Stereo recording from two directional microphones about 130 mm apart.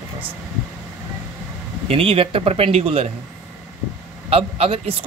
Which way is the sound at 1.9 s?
45° right (ahead or behind).